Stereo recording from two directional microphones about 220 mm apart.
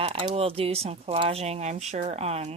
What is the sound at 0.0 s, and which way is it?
Speech, 25° right (ahead or behind).